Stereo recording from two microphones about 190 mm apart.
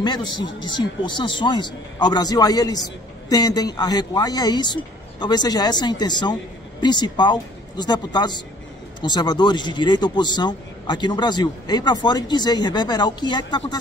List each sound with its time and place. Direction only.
0.0 s speech: 20° left (ahead or behind)